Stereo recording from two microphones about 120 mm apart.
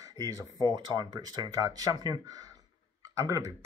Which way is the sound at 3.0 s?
30° right (ahead or behind).